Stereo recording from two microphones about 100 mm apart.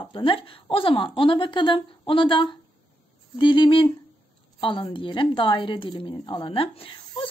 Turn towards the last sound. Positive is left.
turn(degrees=70)  # may be behind; listen again after turning